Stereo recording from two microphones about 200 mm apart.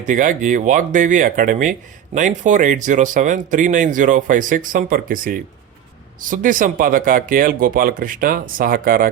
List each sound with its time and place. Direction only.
0.0 s speech: 40° right (ahead or behind)